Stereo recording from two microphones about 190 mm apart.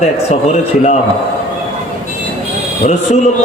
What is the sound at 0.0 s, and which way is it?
Speech, 35° left (ahead or behind).